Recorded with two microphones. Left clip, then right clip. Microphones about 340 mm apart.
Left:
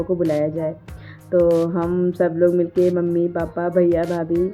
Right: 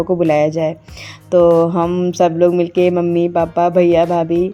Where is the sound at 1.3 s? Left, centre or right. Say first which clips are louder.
Right 6 dB; centre.